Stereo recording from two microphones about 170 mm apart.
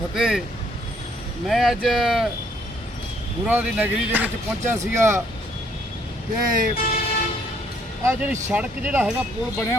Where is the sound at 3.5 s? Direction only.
10° right (ahead or behind).